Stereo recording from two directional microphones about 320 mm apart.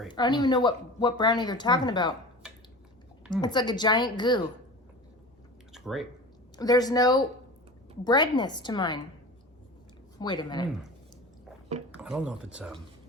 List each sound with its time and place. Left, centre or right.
0.1 s speech: centre
3.4 s speech: centre
5.7 s speech: centre
6.6 s speech: centre
10.2 s speech: centre
11.9 s speech: centre